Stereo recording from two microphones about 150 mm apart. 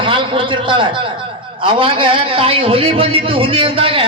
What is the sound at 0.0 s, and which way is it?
A man's voice, 35° right (ahead or behind).